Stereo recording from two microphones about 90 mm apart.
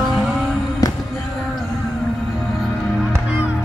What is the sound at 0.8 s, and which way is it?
Music, 40° left (ahead or behind).